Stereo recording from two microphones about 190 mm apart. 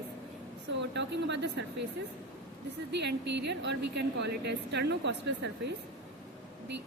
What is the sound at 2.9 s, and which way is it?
A woman's voice, 65° right (ahead or behind).